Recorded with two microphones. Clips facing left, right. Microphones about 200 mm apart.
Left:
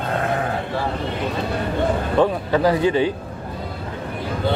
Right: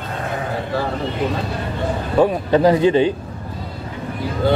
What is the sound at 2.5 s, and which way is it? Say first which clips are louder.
Speech: right 4 dB; 20° right (ahead or behind).